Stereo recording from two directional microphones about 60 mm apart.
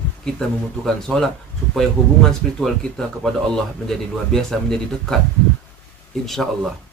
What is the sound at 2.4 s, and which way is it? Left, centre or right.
Speech, centre.